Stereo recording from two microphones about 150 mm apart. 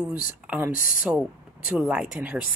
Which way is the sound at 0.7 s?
65° left (ahead or behind).